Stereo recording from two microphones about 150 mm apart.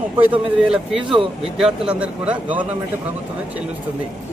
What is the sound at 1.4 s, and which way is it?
Speech, 5° right (ahead or behind).